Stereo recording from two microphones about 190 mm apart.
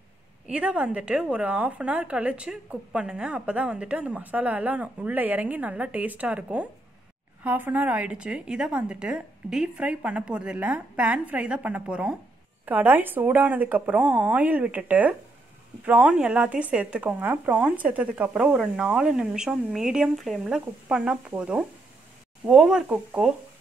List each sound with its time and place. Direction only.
0.5 s speech: 5° right (ahead or behind)